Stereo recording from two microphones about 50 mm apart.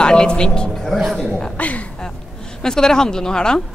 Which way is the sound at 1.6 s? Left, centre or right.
Left.